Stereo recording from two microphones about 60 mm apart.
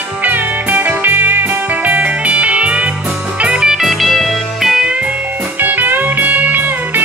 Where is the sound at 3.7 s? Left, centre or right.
Centre.